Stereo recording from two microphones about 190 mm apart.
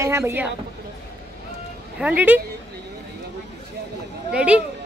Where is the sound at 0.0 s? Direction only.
15° right (ahead or behind).